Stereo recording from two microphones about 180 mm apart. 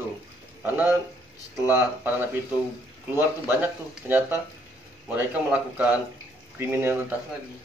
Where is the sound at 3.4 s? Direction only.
10° right (ahead or behind).